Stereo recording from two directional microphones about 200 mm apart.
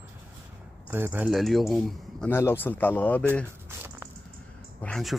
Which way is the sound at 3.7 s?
10° right (ahead or behind).